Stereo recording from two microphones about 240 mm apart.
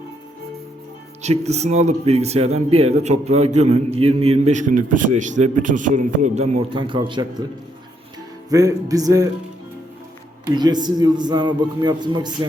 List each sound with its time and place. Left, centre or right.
1.2 s speech: right
8.4 s a man's voice: centre
10.5 s a man's voice: centre